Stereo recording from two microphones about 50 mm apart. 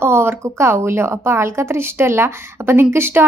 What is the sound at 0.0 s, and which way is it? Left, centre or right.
A woman's voice, right.